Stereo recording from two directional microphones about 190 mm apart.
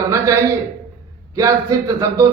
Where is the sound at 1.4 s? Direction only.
15° right (ahead or behind).